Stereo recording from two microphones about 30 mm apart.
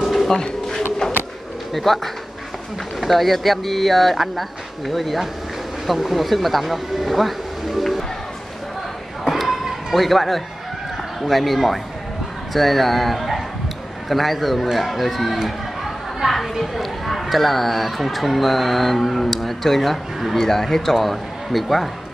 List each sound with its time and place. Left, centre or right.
0.4 s a sound: centre
1.7 s speech: centre
3.0 s speech: centre
9.9 s speech: centre